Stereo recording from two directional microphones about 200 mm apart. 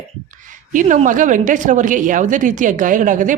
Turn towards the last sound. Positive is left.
turn(degrees=-40)  # may be behind; listen again after turning